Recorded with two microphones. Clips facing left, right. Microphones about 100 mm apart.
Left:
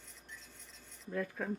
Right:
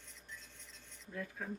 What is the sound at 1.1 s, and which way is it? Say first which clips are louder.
Speech: left 7 dB; 60° left (ahead or behind).